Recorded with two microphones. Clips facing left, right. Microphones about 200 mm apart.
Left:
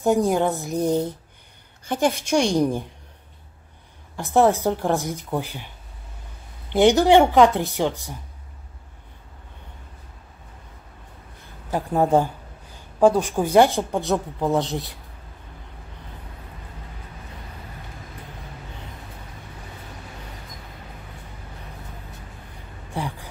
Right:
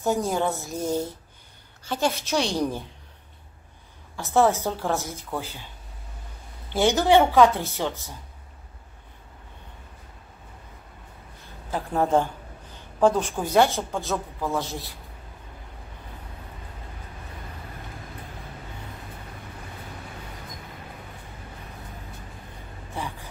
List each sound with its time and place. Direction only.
0.0 s a woman's voice: 15° left (ahead or behind)
4.2 s a woman's voice: 15° left (ahead or behind)
6.7 s a woman's voice: 15° left (ahead or behind)
11.7 s a woman's voice: 15° left (ahead or behind)
22.9 s a sound: 15° left (ahead or behind)